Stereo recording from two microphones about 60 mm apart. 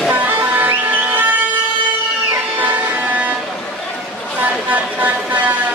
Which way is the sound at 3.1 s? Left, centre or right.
Right.